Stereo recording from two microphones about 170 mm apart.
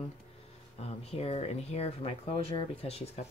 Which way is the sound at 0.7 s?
35° left (ahead or behind).